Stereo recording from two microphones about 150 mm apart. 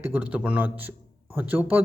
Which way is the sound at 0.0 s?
10° right (ahead or behind).